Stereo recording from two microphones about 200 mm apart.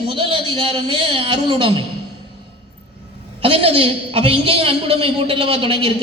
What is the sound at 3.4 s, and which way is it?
A man's voice, 25° right (ahead or behind).